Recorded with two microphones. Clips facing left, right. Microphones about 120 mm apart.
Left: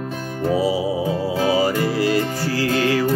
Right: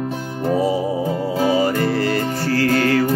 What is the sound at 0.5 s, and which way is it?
Music, 50° right (ahead or behind).